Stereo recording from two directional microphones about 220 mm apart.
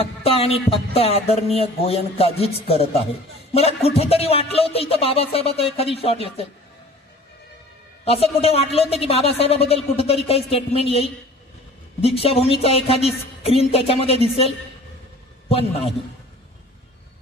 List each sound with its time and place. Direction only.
0.0 s a woman's voice: 25° left (ahead or behind)
8.0 s a woman's voice: 25° left (ahead or behind)